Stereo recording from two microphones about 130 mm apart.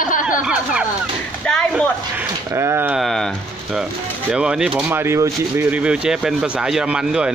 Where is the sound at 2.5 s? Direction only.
20° right (ahead or behind).